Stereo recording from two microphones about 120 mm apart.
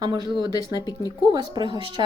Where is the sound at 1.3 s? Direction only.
35° right (ahead or behind).